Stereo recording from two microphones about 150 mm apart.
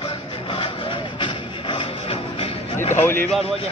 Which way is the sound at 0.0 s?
35° left (ahead or behind).